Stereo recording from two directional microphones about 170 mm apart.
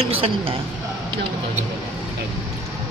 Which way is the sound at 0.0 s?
35° right (ahead or behind).